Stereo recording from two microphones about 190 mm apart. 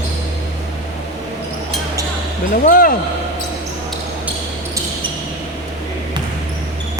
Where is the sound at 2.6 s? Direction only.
50° left (ahead or behind).